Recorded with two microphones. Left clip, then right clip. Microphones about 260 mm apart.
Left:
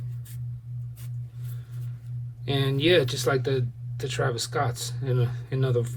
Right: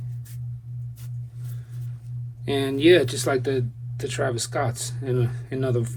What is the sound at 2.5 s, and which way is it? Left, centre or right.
Speech, centre.